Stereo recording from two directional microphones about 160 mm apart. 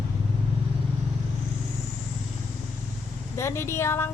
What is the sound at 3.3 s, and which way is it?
Speech, 15° left (ahead or behind).